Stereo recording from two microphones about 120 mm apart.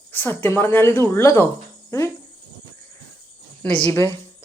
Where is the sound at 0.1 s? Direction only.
15° left (ahead or behind).